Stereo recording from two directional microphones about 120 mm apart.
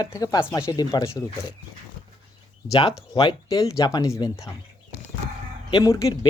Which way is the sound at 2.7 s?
45° left (ahead or behind).